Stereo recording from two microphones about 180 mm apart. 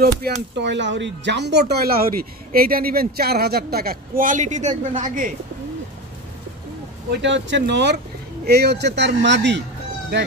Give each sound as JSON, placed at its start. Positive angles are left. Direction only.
{"t": 0.0, "sound": "a man's voice", "side_deg": -65}
{"t": 7.1, "sound": "speech", "side_deg": -85}